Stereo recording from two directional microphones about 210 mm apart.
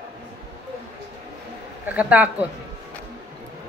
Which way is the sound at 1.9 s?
5° right (ahead or behind).